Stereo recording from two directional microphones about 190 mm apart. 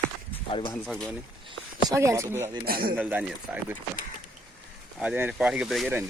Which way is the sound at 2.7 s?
50° right (ahead or behind).